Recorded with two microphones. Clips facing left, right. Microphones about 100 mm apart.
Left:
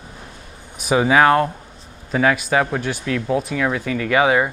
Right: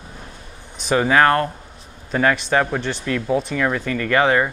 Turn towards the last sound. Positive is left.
turn(degrees=5)  # may be behind; listen again after turning